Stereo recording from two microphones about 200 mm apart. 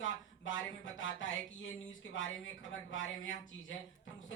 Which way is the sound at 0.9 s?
70° left (ahead or behind).